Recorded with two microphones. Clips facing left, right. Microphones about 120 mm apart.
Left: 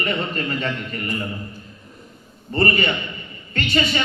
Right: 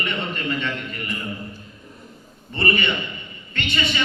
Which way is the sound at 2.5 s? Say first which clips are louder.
Left 3 dB; 40° left (ahead or behind).